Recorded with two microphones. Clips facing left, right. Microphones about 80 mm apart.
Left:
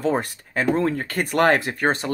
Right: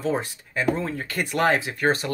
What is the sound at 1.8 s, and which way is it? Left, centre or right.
Speech, left.